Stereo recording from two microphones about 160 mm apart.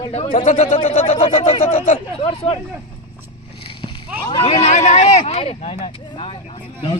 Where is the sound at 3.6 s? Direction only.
35° left (ahead or behind).